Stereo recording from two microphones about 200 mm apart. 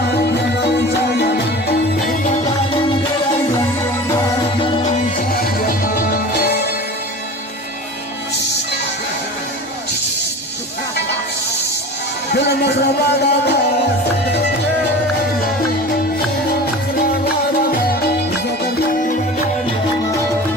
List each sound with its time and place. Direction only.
0.1 s music: 60° left (ahead or behind)
4.2 s music: 25° left (ahead or behind)
4.8 s music: 40° left (ahead or behind)
12.3 s music: 55° left (ahead or behind)